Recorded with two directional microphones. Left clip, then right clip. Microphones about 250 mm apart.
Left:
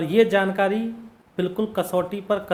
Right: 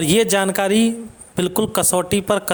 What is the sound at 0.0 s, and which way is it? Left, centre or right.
A man's voice, right.